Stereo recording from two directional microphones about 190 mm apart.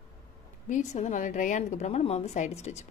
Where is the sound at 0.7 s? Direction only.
40° left (ahead or behind).